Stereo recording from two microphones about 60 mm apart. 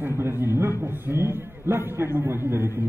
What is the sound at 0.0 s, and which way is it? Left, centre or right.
A man's voice, right.